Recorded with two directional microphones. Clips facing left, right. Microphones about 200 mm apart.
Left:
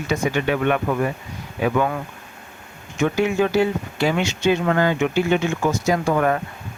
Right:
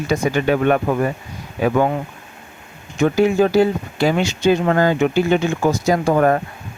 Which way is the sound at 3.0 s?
35° right (ahead or behind).